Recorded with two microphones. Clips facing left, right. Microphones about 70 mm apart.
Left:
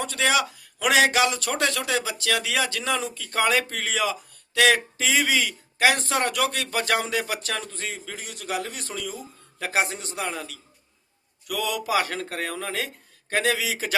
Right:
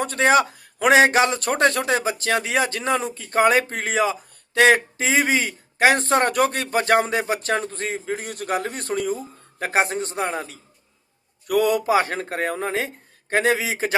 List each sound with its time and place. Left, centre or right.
0.0 s a man's voice: right